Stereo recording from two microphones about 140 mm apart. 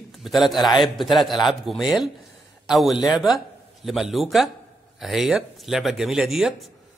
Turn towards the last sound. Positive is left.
turn(degrees=-5)  # may be behind; listen again after turning